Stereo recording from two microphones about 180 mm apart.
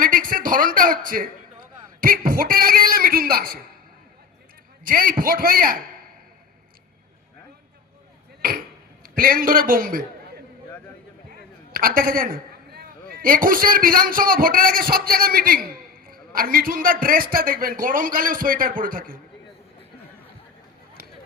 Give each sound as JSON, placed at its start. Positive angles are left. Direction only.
{"t": 0.0, "sound": "a man's voice", "side_deg": -50}
{"t": 4.9, "sound": "a man's voice", "side_deg": -50}
{"t": 8.4, "sound": "a sound", "side_deg": -55}
{"t": 9.0, "sound": "a man's voice", "side_deg": -50}
{"t": 11.7, "sound": "a man's voice", "side_deg": -55}